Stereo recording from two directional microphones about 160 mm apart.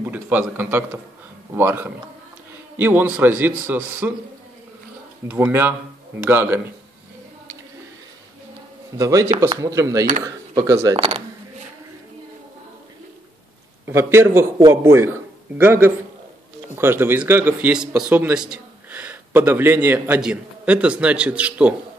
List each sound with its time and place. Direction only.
0.0 s a man's voice: 10° right (ahead or behind)
5.3 s a man's voice: 10° right (ahead or behind)
8.9 s speech: 20° right (ahead or behind)
11.0 s speech: 40° right (ahead or behind)
13.8 s a man's voice: 15° right (ahead or behind)